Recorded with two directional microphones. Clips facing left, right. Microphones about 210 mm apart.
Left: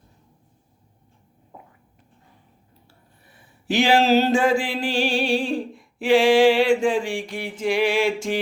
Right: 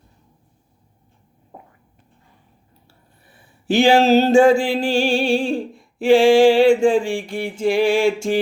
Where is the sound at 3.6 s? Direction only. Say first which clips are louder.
Right 4 dB; 30° right (ahead or behind).